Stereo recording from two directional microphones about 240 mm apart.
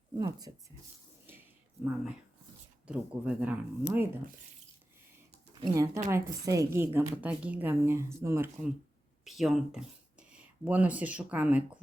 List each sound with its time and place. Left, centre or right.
0.2 s a woman's voice: centre
1.3 s a sound: centre
2.8 s speech: centre
5.5 s a woman's voice: centre